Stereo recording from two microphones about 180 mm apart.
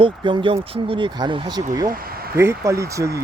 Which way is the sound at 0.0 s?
30° right (ahead or behind).